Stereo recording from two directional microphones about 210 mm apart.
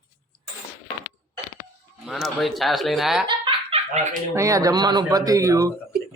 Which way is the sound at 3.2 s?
25° right (ahead or behind).